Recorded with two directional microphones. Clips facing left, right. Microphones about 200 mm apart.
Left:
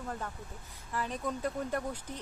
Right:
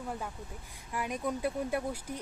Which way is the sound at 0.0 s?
10° right (ahead or behind).